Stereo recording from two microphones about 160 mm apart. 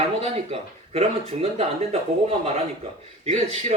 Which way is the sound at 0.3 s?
40° right (ahead or behind).